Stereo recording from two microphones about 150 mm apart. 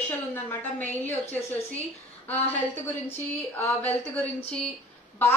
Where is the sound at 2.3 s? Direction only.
10° left (ahead or behind).